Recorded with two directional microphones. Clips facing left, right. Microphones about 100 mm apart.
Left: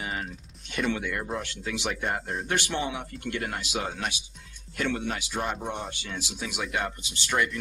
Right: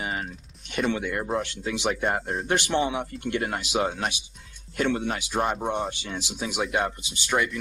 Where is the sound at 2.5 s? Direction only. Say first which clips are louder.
Right 6 dB; 25° right (ahead or behind).